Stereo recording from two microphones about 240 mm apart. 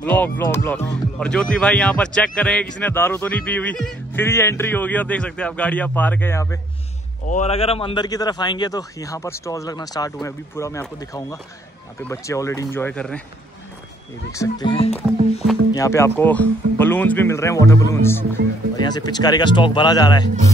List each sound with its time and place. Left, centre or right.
0.0 s speech: centre
7.2 s speech: left; by 13.2 s centre
14.3 s speech: centre
15.7 s speech: centre